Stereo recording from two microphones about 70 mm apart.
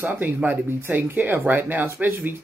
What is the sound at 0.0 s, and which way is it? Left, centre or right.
Speech, right.